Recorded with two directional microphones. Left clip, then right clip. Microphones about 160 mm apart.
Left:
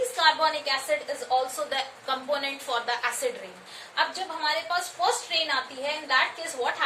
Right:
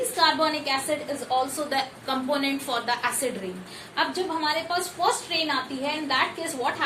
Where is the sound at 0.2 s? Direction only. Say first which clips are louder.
Right 1 dB; 25° right (ahead or behind).